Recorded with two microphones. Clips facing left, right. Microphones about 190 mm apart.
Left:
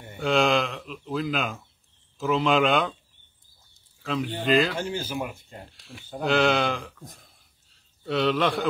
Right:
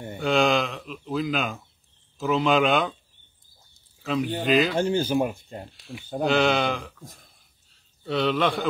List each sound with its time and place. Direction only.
0.2 s speech: centre (ahead or behind)
4.0 s speech: 5° right (ahead or behind)
4.7 s speech: 35° right (ahead or behind)
5.3 s speech: centre (ahead or behind)